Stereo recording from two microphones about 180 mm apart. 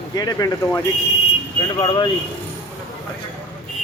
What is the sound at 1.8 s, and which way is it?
Speech, 25° left (ahead or behind).